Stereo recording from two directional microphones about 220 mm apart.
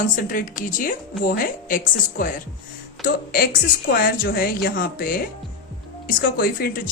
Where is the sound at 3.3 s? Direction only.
40° left (ahead or behind).